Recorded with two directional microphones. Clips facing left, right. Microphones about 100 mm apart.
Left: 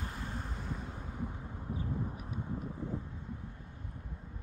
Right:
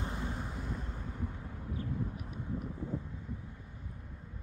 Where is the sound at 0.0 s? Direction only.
20° right (ahead or behind).